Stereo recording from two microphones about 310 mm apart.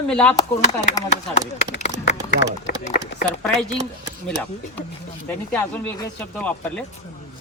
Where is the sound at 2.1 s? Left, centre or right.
Left.